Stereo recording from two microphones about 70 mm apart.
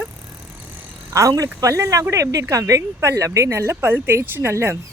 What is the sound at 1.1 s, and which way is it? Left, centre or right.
Speech, right.